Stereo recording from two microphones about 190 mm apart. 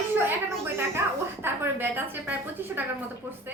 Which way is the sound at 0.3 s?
10° right (ahead or behind).